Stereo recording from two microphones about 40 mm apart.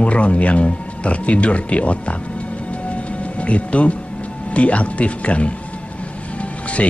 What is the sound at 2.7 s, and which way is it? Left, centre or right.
Music, left.